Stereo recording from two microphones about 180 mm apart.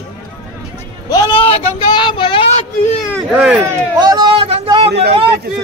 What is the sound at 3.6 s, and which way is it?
Speech, 20° right (ahead or behind).